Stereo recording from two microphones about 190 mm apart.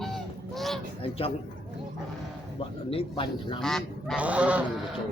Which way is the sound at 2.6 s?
30° left (ahead or behind).